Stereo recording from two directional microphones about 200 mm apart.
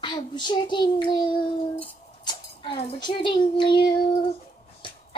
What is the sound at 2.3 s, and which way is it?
A child's voice, 30° left (ahead or behind).